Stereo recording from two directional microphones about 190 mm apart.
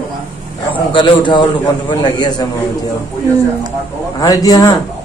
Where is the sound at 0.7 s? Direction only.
25° left (ahead or behind).